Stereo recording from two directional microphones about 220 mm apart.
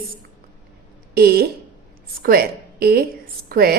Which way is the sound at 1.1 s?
45° right (ahead or behind).